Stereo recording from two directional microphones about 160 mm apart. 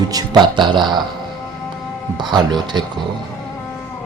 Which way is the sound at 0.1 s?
25° right (ahead or behind).